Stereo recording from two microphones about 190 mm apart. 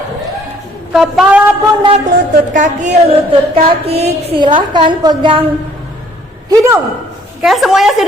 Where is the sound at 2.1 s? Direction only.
40° right (ahead or behind); by 5.4 s 25° right (ahead or behind).